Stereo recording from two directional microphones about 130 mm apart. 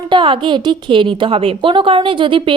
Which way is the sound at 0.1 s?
40° right (ahead or behind).